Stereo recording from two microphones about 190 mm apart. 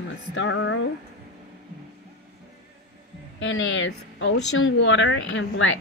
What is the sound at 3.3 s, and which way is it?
A woman's voice, 80° left.